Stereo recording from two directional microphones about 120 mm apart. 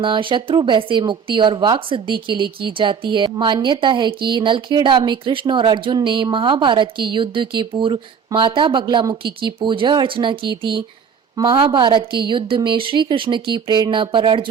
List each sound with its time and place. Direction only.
0.0 s a woman's voice: 45° right (ahead or behind)